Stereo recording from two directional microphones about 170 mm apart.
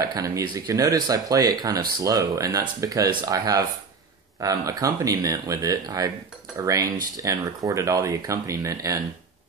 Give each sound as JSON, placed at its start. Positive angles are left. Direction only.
{"t": 0.0, "sound": "speech", "side_deg": -20}